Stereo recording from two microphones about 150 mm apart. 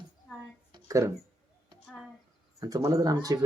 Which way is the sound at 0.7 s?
20° right (ahead or behind).